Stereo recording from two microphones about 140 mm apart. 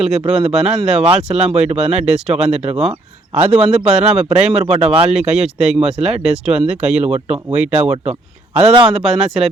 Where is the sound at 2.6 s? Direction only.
50° right (ahead or behind).